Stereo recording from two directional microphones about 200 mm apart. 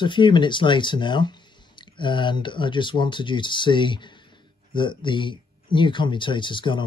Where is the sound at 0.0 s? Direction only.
25° left (ahead or behind).